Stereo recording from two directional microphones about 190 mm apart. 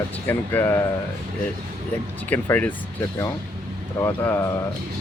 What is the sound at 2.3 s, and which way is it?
Speech, 10° left (ahead or behind).